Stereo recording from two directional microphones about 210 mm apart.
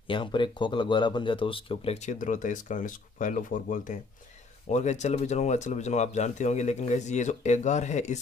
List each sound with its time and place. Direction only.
0.0 s speech: 25° left (ahead or behind)